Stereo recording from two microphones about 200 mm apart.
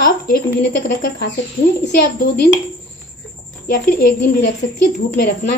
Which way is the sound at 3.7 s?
45° left (ahead or behind).